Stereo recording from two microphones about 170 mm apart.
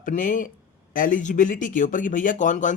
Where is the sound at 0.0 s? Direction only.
50° left (ahead or behind).